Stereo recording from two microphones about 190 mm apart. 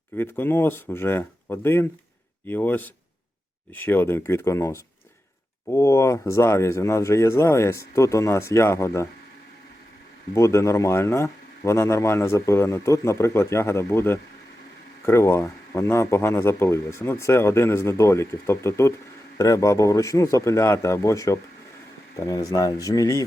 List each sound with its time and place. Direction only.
0.2 s speech: 10° left (ahead or behind)
10.3 s speech: 15° left (ahead or behind)